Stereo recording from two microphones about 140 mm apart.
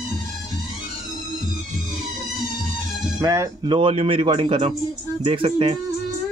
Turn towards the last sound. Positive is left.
turn(degrees=-40)  # may be behind; listen again after turning